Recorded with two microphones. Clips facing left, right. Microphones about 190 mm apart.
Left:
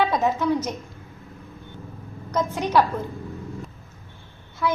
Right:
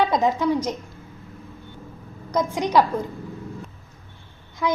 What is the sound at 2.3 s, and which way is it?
Speech, 15° right (ahead or behind).